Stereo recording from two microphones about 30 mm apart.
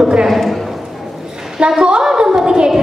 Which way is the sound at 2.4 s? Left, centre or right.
Right.